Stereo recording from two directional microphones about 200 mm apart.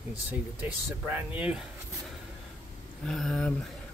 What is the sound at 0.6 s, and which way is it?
Speech, 5° right (ahead or behind).